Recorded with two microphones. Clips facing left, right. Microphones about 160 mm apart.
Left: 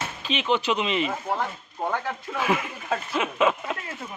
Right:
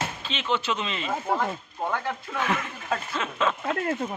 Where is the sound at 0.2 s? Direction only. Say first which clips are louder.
Left 8 dB; 15° left (ahead or behind).